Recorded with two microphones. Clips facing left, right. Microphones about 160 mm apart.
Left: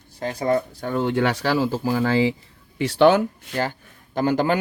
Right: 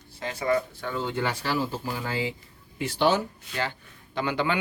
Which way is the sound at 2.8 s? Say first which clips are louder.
Left 8 dB; 75° left (ahead or behind).